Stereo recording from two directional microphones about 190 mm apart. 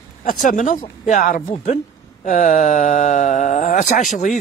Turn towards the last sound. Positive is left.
turn(degrees=40)  # may be behind; listen again after turning